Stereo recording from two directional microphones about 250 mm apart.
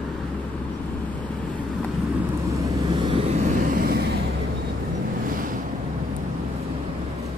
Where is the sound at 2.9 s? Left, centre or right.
Centre; by 4.1 s right.